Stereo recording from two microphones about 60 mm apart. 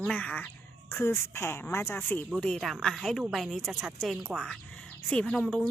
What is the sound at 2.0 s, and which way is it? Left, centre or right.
Speech, left.